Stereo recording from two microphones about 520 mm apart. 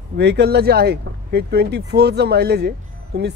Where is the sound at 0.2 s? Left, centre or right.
Centre.